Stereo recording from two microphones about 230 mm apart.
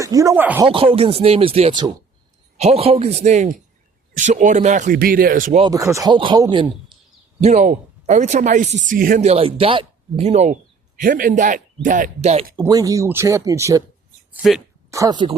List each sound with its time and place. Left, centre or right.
0.0 s speech: centre
0.7 s speech: right
5.6 s speech: centre
7.4 s speech: right
12.5 s speech: centre
14.3 s speech: centre
14.8 s speech: centre